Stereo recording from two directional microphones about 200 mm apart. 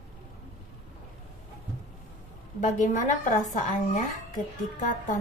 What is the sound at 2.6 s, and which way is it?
A woman's voice, 35° left (ahead or behind).